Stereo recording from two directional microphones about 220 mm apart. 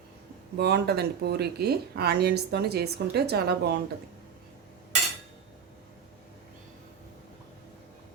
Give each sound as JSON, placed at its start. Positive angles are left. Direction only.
{"t": 0.5, "sound": "speech", "side_deg": -50}